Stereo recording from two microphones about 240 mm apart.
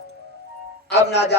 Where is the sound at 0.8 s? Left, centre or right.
Left.